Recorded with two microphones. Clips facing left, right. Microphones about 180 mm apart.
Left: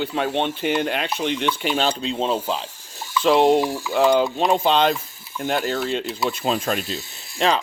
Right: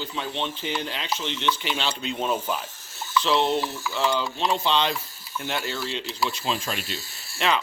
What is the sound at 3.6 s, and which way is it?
Stir, 15° left (ahead or behind).